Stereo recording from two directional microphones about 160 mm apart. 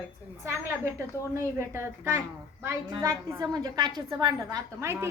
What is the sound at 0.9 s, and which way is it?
A woman's voice, 15° right (ahead or behind).